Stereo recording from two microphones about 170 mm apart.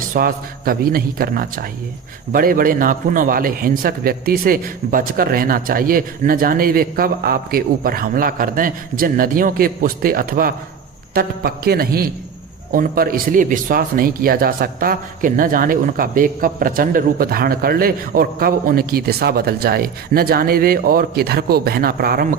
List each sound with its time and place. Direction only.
0.1 s speech: 60° right (ahead or behind)